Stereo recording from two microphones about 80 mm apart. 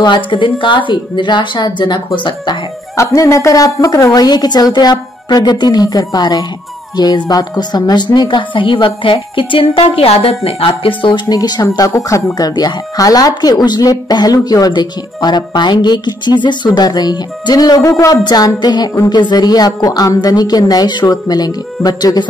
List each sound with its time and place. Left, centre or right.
0.0 s a woman's voice: left
3.0 s a woman's voice: left
11.9 s speech: left
12.4 s speech: left
14.7 s speech: left